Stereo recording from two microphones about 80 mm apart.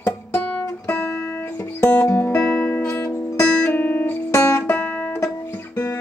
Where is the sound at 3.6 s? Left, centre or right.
Left.